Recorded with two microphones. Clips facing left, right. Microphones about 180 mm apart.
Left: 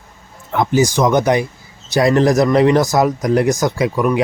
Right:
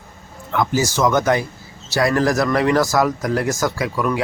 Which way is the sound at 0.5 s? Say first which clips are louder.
Left 4 dB; 20° left (ahead or behind).